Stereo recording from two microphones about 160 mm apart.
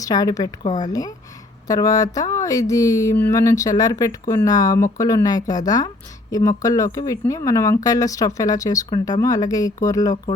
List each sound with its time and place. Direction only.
0.0 s speech: 20° left (ahead or behind)